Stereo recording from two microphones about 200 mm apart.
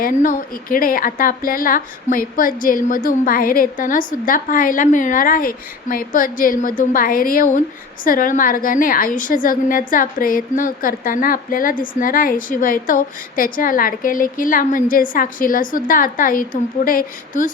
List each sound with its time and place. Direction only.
0.0 s a woman's voice: 40° left (ahead or behind)